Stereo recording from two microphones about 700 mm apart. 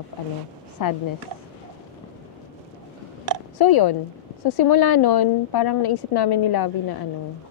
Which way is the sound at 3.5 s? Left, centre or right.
Left.